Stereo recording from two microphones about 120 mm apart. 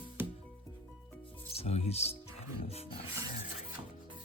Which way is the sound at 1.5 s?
60° left (ahead or behind).